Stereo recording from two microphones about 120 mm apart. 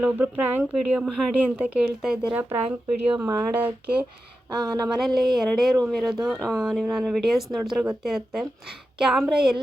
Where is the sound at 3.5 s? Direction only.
15° right (ahead or behind).